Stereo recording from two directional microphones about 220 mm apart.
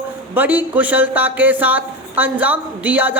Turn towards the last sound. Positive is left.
turn(degrees=-5)  # may be behind; listen again after turning